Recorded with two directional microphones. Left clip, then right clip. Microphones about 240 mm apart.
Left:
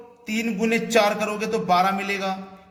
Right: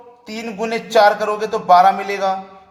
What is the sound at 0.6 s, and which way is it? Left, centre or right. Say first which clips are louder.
A man's voice: right 7 dB; centre.